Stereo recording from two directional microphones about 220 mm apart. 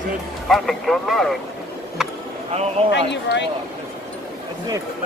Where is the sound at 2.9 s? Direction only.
50° left (ahead or behind).